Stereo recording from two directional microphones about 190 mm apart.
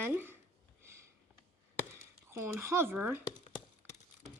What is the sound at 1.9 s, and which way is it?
Speech, 15° right (ahead or behind).